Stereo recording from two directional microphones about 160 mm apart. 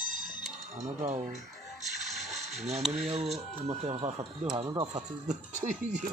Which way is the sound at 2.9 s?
40° right (ahead or behind).